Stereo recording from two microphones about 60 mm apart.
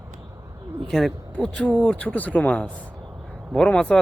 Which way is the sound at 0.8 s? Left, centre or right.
Centre.